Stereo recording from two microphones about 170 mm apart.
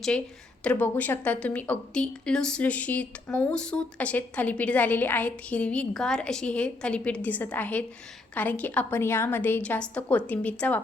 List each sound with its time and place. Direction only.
0.6 s a woman's voice: 5° left (ahead or behind)